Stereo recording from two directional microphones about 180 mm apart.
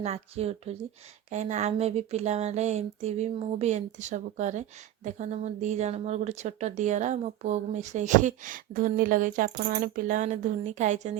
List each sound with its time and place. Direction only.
0.0 s speech: 35° right (ahead or behind)